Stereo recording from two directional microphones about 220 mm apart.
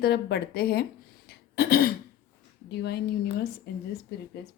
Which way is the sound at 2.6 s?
45° left (ahead or behind).